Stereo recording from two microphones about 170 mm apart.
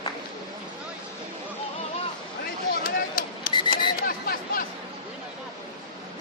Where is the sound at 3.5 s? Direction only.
25° left (ahead or behind).